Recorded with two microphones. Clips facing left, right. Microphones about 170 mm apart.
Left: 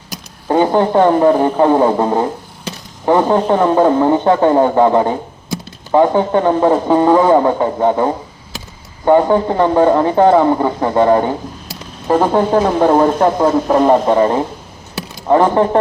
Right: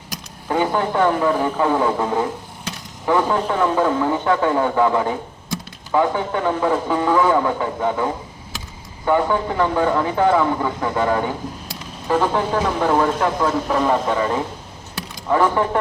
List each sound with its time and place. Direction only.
0.4 s a man's voice: 35° left (ahead or behind)